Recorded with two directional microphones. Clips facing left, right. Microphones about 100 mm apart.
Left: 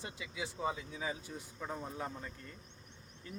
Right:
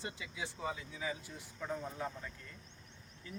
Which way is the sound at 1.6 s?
10° left (ahead or behind).